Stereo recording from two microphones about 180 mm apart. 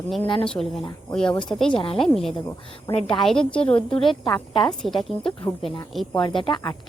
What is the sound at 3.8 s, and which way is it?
Speech, 30° left (ahead or behind).